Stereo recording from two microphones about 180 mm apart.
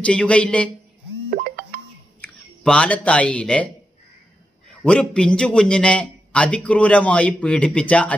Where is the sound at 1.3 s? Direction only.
55° right (ahead or behind).